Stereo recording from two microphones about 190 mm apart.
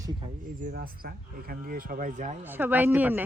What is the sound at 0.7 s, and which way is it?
Speech, 50° right (ahead or behind).